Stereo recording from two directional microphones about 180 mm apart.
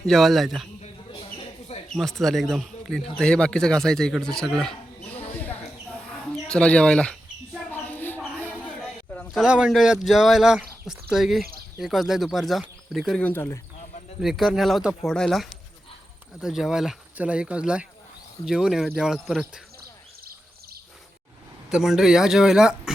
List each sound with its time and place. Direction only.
0.0 s speech: centre (ahead or behind)
0.8 s a sound: 35° left (ahead or behind)
1.9 s speech: centre (ahead or behind)
5.3 s a sound: 10° left (ahead or behind)
9.1 s speech: centre (ahead or behind)
14.2 s speech: centre (ahead or behind)
21.7 s speech: 5° right (ahead or behind)